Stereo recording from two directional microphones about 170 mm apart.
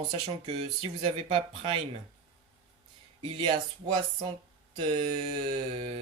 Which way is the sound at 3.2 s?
30° right (ahead or behind).